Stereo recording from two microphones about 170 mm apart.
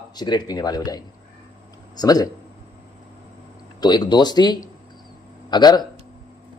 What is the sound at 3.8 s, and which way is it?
Speech, 25° left (ahead or behind).